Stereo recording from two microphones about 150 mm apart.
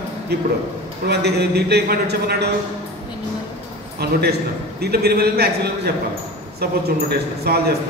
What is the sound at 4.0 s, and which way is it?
A man's voice, 90° right.